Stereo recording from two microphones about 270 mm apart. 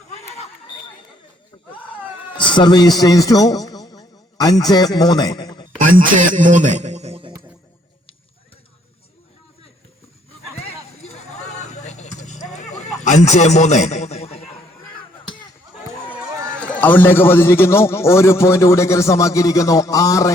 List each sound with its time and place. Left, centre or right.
2.4 s a man's voice: centre
5.8 s a man's voice: right
11.0 s a sound: left
16.0 s a man's voice: centre